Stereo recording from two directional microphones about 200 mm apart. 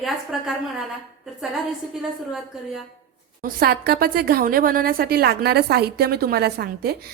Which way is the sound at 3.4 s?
50° right (ahead or behind).